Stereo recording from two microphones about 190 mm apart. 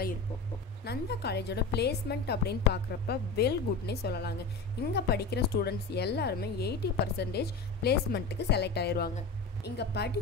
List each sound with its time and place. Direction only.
0.8 s a woman's voice: 60° left (ahead or behind)